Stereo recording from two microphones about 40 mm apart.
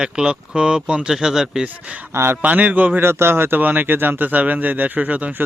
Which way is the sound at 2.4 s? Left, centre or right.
Right.